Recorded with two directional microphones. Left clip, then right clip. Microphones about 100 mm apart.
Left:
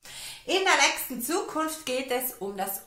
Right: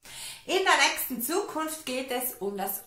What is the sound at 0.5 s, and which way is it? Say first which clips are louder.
A woman's voice: left 1 dB; 30° left (ahead or behind).